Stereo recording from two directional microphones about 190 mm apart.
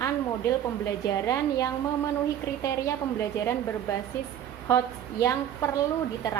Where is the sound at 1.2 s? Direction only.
20° left (ahead or behind).